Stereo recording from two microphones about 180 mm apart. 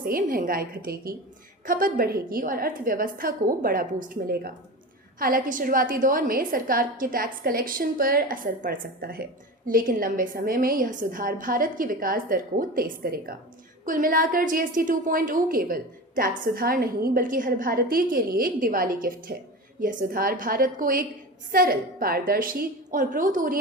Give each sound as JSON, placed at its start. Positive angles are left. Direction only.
{"t": 0.0, "sound": "a woman's voice", "side_deg": -50}